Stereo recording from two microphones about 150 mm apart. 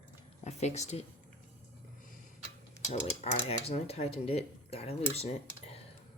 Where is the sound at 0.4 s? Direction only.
50° left (ahead or behind).